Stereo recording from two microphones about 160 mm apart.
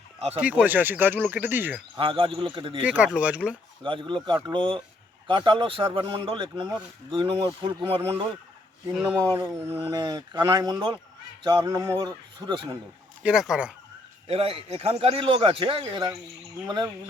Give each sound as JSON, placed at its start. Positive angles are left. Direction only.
{"t": 0.3, "sound": "speech", "side_deg": -10}
{"t": 2.0, "sound": "speech", "side_deg": -30}
{"t": 2.8, "sound": "speech", "side_deg": -10}
{"t": 3.8, "sound": "speech", "side_deg": -30}
{"t": 9.7, "sound": "speech", "side_deg": -30}
{"t": 13.2, "sound": "speech", "side_deg": -5}
{"t": 14.3, "sound": "speech", "side_deg": -35}